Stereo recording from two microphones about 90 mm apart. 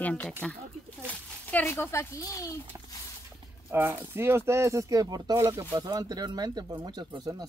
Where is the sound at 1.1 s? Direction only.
15° left (ahead or behind).